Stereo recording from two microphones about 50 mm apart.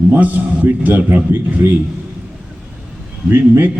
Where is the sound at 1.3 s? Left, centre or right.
Right.